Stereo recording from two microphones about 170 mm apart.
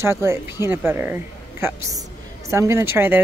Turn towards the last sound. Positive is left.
turn(degrees=-10)  # may be behind; listen again after turning